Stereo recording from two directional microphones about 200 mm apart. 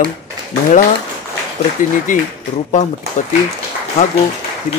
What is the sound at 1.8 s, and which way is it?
Speech, 40° left (ahead or behind).